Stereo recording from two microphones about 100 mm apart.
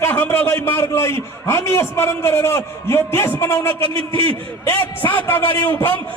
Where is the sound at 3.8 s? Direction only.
65° right (ahead or behind).